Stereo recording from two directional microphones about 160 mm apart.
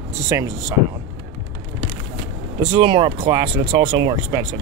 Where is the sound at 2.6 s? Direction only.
30° right (ahead or behind).